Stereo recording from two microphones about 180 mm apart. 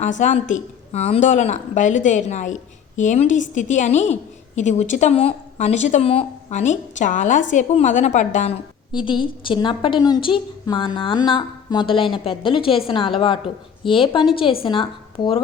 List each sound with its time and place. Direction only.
0.0 s a woman's voice: 45° left (ahead or behind)
8.9 s a woman's voice: 25° left (ahead or behind)